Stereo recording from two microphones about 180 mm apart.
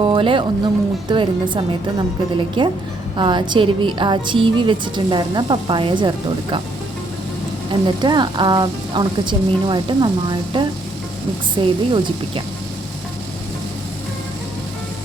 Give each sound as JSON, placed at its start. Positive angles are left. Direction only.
{"t": 0.0, "sound": "a woman's voice", "side_deg": -30}
{"t": 7.7, "sound": "a woman's voice", "side_deg": -25}